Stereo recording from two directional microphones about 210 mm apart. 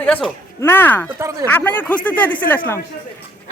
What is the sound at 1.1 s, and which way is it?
Speech, 10° right (ahead or behind).